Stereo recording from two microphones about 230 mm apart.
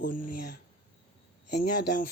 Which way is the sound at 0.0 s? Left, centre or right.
Left.